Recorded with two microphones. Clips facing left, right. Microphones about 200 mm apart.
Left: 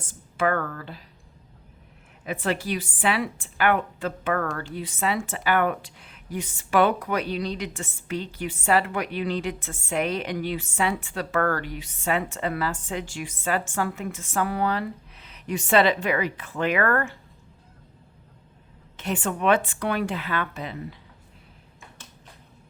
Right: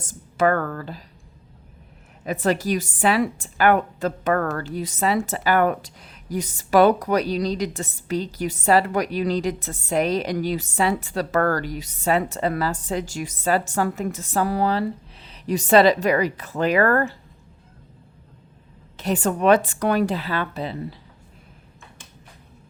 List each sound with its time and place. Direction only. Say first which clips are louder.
0.0 s speech: right 5 dB; 40° right (ahead or behind)
2.2 s a woman's voice: right 5 dB; 40° right (ahead or behind)
18.9 s a woman's voice: right 5 dB; 40° right (ahead or behind)